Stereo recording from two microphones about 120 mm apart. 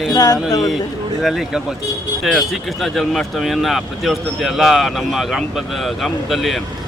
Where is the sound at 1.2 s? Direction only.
Centre (ahead or behind).